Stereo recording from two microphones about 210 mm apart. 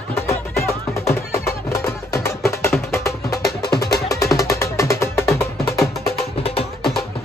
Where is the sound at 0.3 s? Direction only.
15° left (ahead or behind).